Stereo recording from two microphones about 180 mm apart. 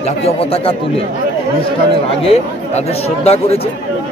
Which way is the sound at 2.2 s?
35° left (ahead or behind).